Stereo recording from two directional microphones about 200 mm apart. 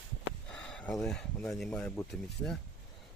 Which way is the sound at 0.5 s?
5° left (ahead or behind).